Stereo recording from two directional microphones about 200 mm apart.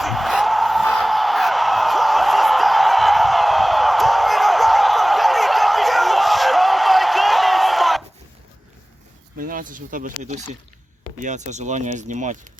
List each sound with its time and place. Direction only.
0.0 s music: centre (ahead or behind)
9.4 s a sound: 45° right (ahead or behind)
11.2 s speech: 35° right (ahead or behind)